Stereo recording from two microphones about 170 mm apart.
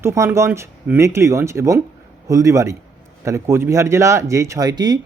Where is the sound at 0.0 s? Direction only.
15° right (ahead or behind).